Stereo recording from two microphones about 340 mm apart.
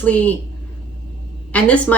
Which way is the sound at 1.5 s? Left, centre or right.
Centre.